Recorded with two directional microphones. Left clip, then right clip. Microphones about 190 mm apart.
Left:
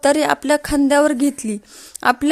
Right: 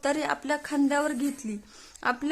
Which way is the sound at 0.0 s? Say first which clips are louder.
Left 12 dB; 35° left (ahead or behind).